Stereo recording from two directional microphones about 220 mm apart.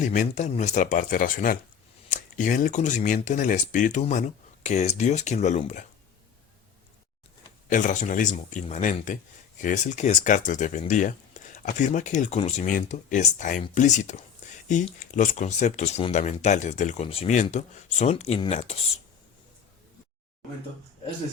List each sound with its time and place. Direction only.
0.0 s speech: 35° left (ahead or behind)
7.7 s speech: 35° left (ahead or behind)